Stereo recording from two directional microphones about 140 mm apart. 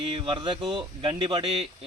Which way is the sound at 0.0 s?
40° right (ahead or behind).